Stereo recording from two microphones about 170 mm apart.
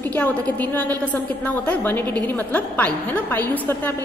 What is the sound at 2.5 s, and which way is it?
A woman's voice, 10° left (ahead or behind).